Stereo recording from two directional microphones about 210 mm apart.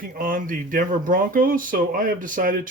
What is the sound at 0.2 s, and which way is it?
Speech, 40° right (ahead or behind).